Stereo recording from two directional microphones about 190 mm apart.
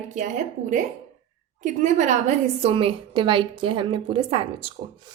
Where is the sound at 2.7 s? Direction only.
30° right (ahead or behind).